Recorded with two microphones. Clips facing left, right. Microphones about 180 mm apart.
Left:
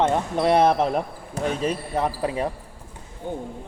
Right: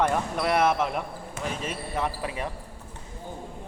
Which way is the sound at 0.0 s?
25° left (ahead or behind).